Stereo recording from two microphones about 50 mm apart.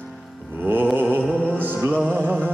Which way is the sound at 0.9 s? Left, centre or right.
Right.